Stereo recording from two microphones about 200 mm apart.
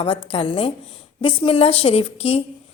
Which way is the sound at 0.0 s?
25° left (ahead or behind).